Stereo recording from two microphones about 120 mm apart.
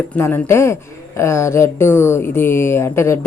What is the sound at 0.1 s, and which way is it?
Speech, 15° left (ahead or behind).